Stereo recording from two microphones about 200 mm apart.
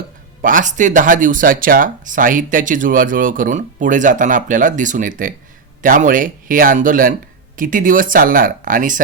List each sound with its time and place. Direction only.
0.4 s speech: 40° right (ahead or behind)